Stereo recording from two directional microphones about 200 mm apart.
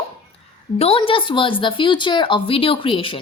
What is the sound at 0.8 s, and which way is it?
A woman's voice, 25° left (ahead or behind).